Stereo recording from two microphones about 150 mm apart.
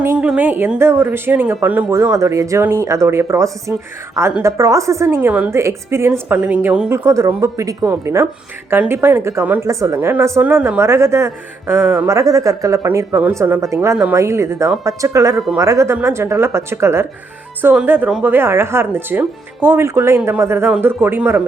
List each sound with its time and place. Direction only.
0.0 s a woman's voice: 10° right (ahead or behind)